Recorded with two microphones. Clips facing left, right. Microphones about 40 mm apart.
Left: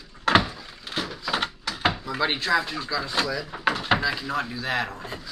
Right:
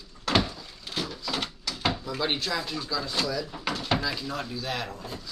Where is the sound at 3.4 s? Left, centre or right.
Left.